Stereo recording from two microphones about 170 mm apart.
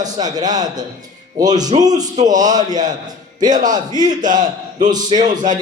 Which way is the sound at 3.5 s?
50° right (ahead or behind).